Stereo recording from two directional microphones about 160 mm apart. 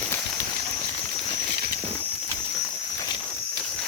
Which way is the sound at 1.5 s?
75° right (ahead or behind).